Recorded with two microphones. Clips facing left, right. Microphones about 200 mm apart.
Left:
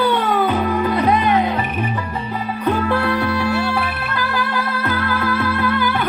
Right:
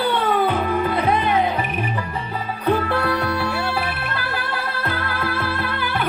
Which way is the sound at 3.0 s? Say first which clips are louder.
Left 3 dB; 35° right (ahead or behind).